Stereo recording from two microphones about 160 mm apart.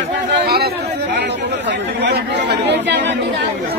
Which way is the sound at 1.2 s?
90° right.